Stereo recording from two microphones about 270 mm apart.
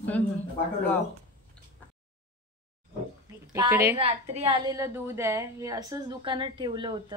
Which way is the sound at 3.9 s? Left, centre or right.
Right.